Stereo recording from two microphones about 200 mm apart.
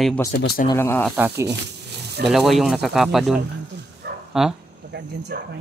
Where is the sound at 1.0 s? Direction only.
10° right (ahead or behind).